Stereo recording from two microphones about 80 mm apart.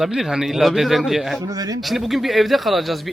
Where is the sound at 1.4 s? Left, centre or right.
Right.